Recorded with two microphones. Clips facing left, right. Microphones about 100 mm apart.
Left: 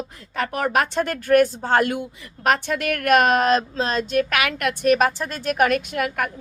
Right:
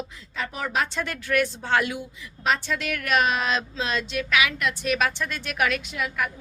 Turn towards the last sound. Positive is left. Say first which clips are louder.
# left 4 dB
turn(degrees=55)  # may be behind; listen again after turning